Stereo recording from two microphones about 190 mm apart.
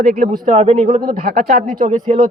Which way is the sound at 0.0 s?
45° right (ahead or behind).